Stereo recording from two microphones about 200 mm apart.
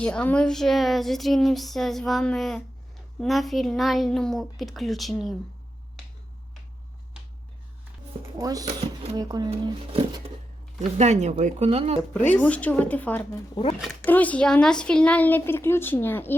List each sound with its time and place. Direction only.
0.0 s speech: 5° left (ahead or behind)
8.4 s speech: 20° right (ahead or behind)
12.3 s speech: 5° left (ahead or behind)